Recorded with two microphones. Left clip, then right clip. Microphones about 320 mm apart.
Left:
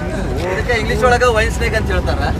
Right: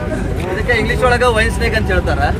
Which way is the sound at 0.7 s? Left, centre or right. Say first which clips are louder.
Right 1 dB; centre.